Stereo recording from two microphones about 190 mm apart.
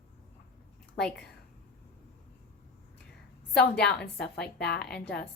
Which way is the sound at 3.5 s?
5° left (ahead or behind).